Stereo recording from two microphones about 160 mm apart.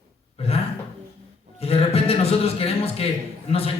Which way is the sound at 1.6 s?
40° left (ahead or behind).